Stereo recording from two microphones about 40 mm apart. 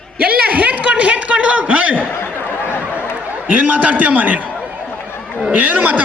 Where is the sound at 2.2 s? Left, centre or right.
Left.